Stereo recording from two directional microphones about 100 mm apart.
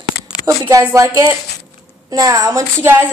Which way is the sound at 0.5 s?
35° right (ahead or behind).